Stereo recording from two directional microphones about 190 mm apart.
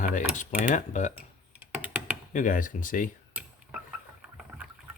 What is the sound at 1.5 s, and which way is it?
Computer keyboard, 10° right (ahead or behind).